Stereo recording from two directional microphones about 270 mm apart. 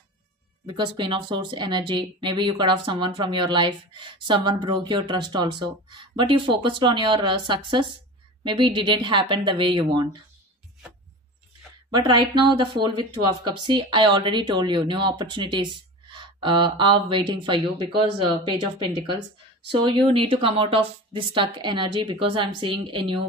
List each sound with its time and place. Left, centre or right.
0.7 s speech: centre
11.9 s speech: centre